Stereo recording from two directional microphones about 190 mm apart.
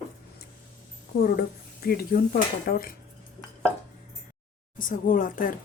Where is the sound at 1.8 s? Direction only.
55° left (ahead or behind).